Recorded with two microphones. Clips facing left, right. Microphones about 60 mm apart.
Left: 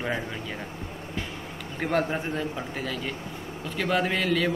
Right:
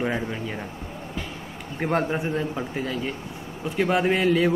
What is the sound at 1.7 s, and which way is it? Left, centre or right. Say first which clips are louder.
Speech: right 2 dB; centre.